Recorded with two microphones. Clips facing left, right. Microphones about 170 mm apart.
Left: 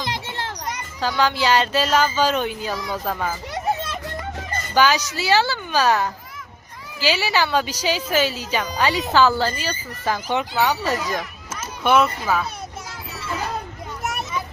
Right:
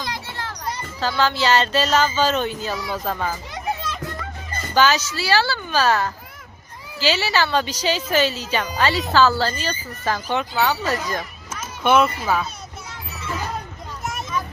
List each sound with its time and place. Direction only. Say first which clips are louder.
0.0 s children playing: left 2 dB; 20° left (ahead or behind)
1.0 s a child's voice: even; 15° left (ahead or behind)
4.7 s speech: even; 10° left (ahead or behind)
11.2 s a child's voice: left 1 dB; centre (ahead or behind)
14.0 s a sound: left 2 dB; 65° left (ahead or behind)